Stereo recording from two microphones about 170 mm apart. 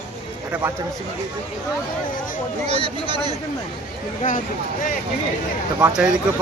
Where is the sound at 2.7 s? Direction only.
30° right (ahead or behind).